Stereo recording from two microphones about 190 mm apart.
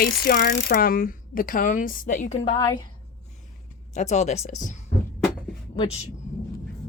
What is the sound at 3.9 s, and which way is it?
Speech, 35° left (ahead or behind).